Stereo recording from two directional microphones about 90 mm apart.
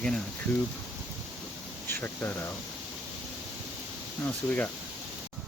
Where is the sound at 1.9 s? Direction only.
25° left (ahead or behind).